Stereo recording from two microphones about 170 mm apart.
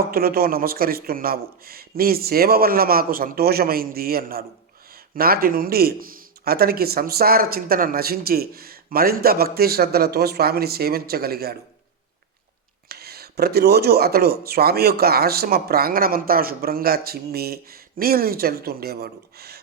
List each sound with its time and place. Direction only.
0.1 s speech: 60° right (ahead or behind)
12.9 s speech: 65° right (ahead or behind)